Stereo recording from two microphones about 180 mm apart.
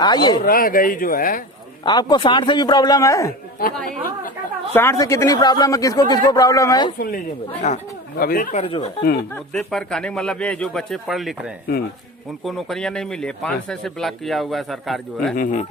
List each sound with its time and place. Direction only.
0.0 s speech: 25° left (ahead or behind)
0.4 s speech: 55° left (ahead or behind)
1.8 s speech: 25° left (ahead or behind)
4.7 s speech: 15° left (ahead or behind)
7.6 s speech: 40° left (ahead or behind)
8.2 s speech: 55° left (ahead or behind)
8.5 s speech: 30° left (ahead or behind)
9.3 s speech: 5° left (ahead or behind)
15.4 s speech: 45° left (ahead or behind)